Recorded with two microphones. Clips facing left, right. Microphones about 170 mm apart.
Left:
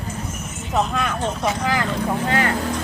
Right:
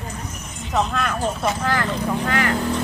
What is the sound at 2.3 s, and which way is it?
Speech, 30° left (ahead or behind).